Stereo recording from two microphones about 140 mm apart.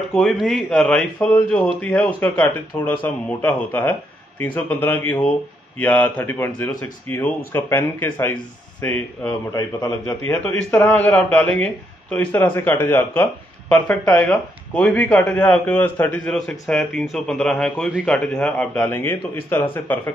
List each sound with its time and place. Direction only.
0.1 s a man's voice: 5° left (ahead or behind)
9.5 s a man's voice: 25° left (ahead or behind)
10.0 s a man's voice: 10° left (ahead or behind)